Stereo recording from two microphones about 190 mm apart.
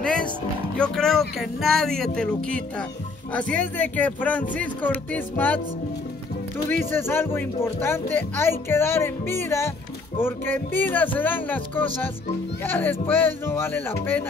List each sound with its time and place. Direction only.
0.0 s music: 5° left (ahead or behind)
0.7 s a sound: 5° left (ahead or behind)
1.4 s speech: centre (ahead or behind)
6.9 s speech: 10° left (ahead or behind)